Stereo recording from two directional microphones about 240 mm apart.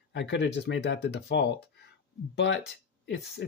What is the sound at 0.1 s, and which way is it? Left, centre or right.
Speech, left.